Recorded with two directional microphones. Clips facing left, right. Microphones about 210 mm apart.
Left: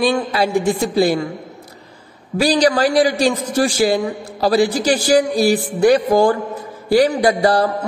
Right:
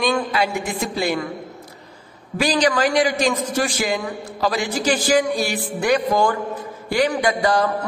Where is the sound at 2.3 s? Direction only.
35° left (ahead or behind).